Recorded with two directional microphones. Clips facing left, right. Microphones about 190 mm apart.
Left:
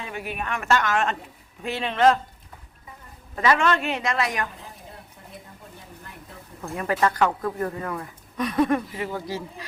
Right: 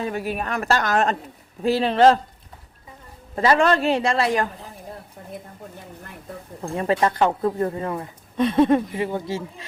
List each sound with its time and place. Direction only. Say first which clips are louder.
0.0 s speech: right 6 dB; 40° right (ahead or behind)
3.3 s speech: right 4 dB; 35° right (ahead or behind)
6.6 s speech: right 3 dB; 30° right (ahead or behind)